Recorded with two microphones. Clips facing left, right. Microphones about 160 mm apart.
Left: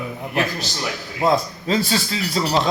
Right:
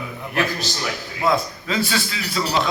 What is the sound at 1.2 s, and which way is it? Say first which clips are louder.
A man's voice: left 2 dB; 35° left (ahead or behind).